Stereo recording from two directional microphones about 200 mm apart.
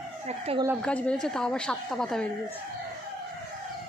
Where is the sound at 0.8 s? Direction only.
5° left (ahead or behind).